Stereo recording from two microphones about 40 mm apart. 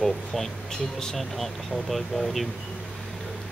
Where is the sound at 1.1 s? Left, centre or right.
Centre.